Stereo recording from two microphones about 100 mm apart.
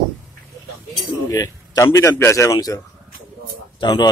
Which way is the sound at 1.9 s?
30° left (ahead or behind).